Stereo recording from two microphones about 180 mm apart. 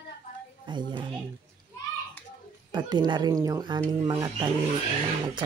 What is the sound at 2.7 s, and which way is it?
Speech, 25° right (ahead or behind).